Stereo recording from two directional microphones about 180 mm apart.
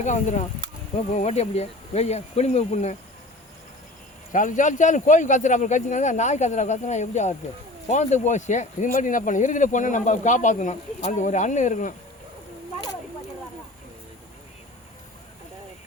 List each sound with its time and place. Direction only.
0.0 s speech: 40° left (ahead or behind)
4.3 s speech: 45° left (ahead or behind)